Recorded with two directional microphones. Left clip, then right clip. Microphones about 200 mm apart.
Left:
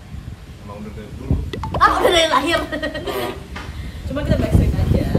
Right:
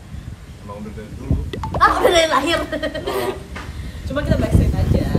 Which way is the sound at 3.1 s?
Centre (ahead or behind).